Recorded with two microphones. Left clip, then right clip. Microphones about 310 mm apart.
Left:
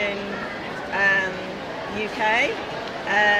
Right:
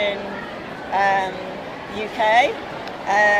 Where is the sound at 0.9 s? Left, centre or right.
Centre.